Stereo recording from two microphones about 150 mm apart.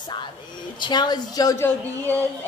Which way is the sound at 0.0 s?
30° left (ahead or behind).